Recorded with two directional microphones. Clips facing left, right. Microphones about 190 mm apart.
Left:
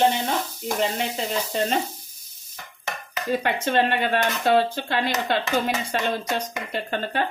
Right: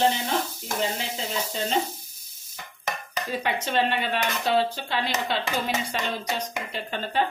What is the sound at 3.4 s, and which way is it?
Speech, 55° left (ahead or behind).